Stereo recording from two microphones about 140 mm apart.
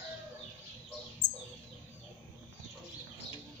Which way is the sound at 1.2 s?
30° left (ahead or behind).